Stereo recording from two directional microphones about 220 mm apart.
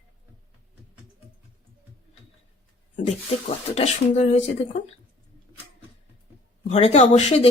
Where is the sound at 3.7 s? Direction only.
30° left (ahead or behind).